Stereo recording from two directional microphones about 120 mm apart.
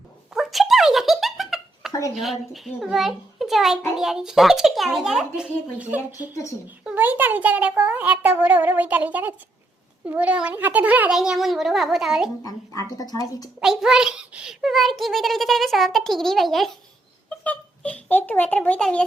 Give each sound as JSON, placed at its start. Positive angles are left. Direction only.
{"t": 0.3, "sound": "giggle", "side_deg": 0}
{"t": 2.1, "sound": "a child's voice", "side_deg": 0}
{"t": 6.1, "sound": "speech", "side_deg": 30}
{"t": 6.8, "sound": "a child's voice", "side_deg": -15}
{"t": 11.2, "sound": "a child's voice", "side_deg": 0}
{"t": 12.4, "sound": "speech", "side_deg": 30}
{"t": 13.6, "sound": "a child's voice", "side_deg": -5}
{"t": 17.2, "sound": "a child's voice", "side_deg": 10}